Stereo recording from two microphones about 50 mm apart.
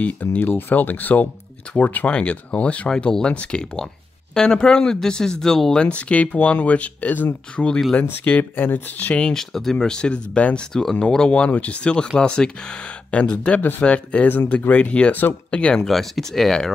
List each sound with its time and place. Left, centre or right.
0.0 s speech: left
0.4 s speech: left
2.1 s speech: left
3.1 s speech: centre
5.8 s speech: left
8.5 s speech: left
9.3 s speech: centre
10.7 s speech: centre; by 13.6 s left
13.6 s speech: left
13.8 s speech: left
15.8 s speech: centre